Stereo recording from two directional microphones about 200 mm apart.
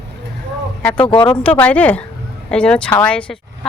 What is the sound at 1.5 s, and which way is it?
Speech, 5° left (ahead or behind).